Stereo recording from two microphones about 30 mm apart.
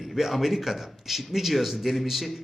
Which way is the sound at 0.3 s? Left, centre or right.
Centre.